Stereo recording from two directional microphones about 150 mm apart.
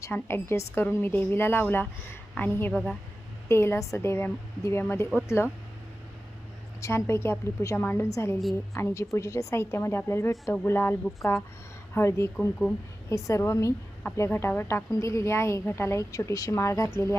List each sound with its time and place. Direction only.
0.0 s speech: 15° left (ahead or behind)
6.8 s speech: 15° left (ahead or behind)